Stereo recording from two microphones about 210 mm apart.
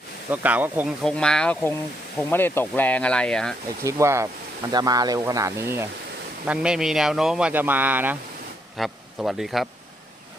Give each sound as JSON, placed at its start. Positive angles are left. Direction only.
{"t": 0.3, "sound": "speech", "side_deg": -10}
{"t": 3.8, "sound": "speech", "side_deg": -15}